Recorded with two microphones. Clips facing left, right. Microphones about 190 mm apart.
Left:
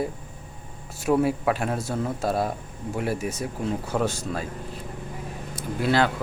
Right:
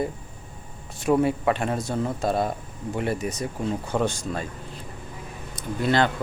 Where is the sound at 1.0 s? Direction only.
Centre (ahead or behind).